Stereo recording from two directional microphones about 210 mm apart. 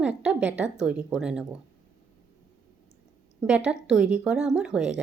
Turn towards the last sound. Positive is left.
turn(degrees=-5)  # may be behind; listen again after turning